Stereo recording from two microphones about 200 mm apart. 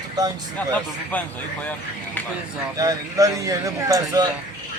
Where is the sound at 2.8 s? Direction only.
15° right (ahead or behind).